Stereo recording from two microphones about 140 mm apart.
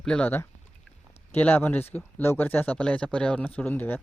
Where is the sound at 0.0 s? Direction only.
5° left (ahead or behind).